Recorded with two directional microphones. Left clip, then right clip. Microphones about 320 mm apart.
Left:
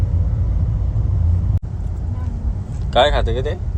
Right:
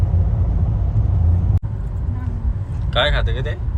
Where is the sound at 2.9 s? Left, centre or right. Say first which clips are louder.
Left 4 dB; centre.